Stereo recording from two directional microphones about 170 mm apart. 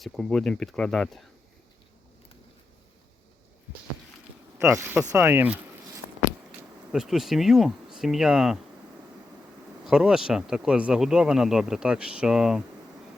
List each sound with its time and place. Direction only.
0.0 s speech: centre (ahead or behind)
4.5 s speech: 15° right (ahead or behind)
6.9 s speech: centre (ahead or behind)
9.8 s speech: 5° right (ahead or behind)